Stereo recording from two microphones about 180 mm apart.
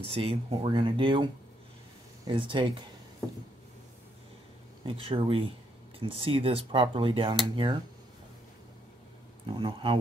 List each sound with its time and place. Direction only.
0.1 s speech: 30° right (ahead or behind)
4.8 s speech: 30° right (ahead or behind)
9.5 s speech: 25° right (ahead or behind)